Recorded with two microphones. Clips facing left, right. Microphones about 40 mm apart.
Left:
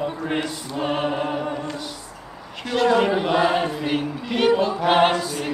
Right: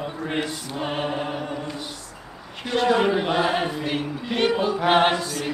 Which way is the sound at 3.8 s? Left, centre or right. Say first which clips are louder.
Left 2 dB; centre.